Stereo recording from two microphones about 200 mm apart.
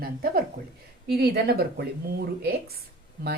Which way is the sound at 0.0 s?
50° right (ahead or behind).